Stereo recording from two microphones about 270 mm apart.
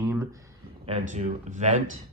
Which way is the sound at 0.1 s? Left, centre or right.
Centre.